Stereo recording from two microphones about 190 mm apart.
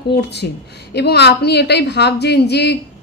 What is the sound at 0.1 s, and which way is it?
A woman's voice, 60° left (ahead or behind).